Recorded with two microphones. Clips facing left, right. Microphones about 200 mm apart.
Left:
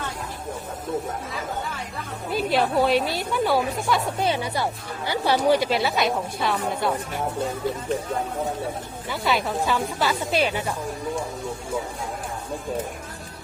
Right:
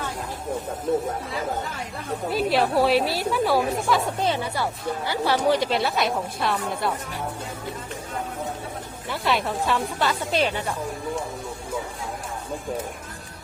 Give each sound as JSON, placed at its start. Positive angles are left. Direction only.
{"t": 2.3, "sound": "a woman's voice", "side_deg": 0}
{"t": 4.2, "sound": "a woman's voice", "side_deg": 10}
{"t": 9.0, "sound": "a woman's voice", "side_deg": 0}